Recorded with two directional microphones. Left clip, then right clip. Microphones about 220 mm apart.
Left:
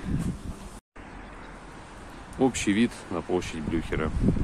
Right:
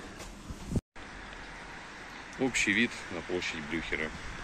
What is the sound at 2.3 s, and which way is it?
Speech, 20° left (ahead or behind).